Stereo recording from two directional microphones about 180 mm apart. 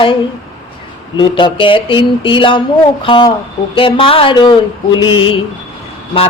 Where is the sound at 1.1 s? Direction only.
25° left (ahead or behind).